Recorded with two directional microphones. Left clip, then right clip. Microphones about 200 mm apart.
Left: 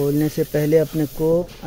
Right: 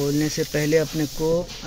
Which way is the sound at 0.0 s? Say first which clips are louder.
Left 3 dB; 15° left (ahead or behind).